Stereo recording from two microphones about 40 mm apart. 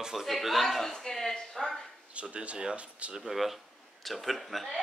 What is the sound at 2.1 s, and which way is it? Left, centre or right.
Speech, right.